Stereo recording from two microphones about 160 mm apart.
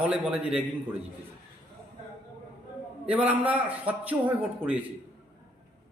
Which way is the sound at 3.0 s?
10° right (ahead or behind).